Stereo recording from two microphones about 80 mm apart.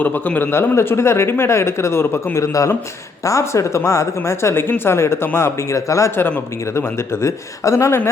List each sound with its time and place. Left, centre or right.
0.0 s a man's voice: left